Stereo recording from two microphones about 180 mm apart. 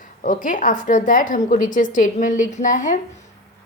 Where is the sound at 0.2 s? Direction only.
50° left (ahead or behind).